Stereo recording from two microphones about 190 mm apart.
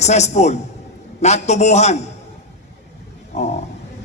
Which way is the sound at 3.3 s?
35° left (ahead or behind).